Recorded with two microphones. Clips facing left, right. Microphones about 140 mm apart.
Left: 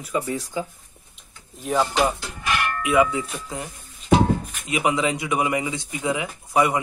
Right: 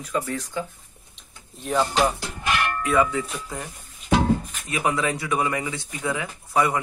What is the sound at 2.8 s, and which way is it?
Speech, 15° left (ahead or behind).